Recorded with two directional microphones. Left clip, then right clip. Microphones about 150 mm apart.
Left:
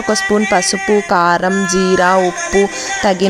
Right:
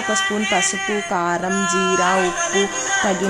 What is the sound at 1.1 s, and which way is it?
Speech, 55° left (ahead or behind).